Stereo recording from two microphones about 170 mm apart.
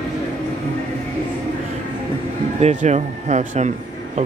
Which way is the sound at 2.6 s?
45° right (ahead or behind).